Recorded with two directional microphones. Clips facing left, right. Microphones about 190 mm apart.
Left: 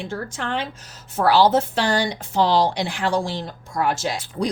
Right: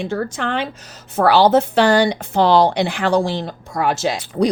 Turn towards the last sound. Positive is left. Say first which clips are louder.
# right 7 dB
turn(degrees=-70)  # may be behind; listen again after turning